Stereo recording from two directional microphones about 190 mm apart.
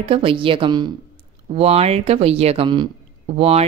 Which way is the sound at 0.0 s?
30° right (ahead or behind).